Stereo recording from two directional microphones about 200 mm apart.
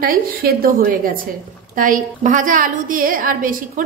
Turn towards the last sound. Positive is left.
turn(degrees=-45)  # may be behind; listen again after turning